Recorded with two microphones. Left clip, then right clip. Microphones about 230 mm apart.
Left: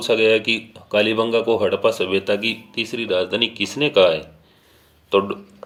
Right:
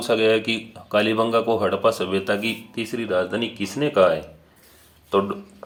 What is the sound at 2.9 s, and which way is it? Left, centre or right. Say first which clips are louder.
Speech: left 2 dB; left.